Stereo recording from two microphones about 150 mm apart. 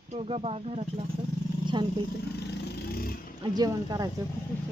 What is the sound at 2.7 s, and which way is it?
Vehicle, 85° left.